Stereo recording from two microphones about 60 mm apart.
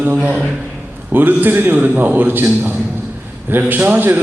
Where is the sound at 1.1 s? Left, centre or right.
Right.